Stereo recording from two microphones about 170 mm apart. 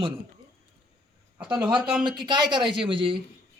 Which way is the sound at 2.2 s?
25° right (ahead or behind).